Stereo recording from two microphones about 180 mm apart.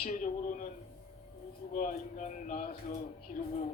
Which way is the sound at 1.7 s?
45° left (ahead or behind).